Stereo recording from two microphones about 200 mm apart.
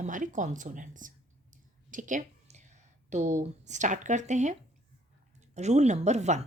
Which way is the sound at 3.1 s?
35° right (ahead or behind).